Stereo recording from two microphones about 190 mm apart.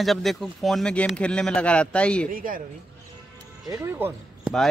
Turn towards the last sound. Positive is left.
turn(degrees=-10)  # may be behind; listen again after turning